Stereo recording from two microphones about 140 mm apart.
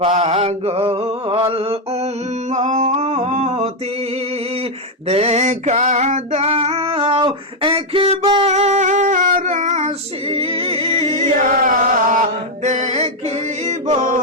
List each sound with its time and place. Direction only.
0.0 s a sound: 45° right (ahead or behind)
1.5 s mantra: 45° right (ahead or behind)
2.5 s singing: 55° right (ahead or behind)
5.0 s female singing: 45° right (ahead or behind)
10.2 s music: 40° right (ahead or behind)
11.2 s chant: 75° right (ahead or behind)
12.6 s music: 55° right (ahead or behind)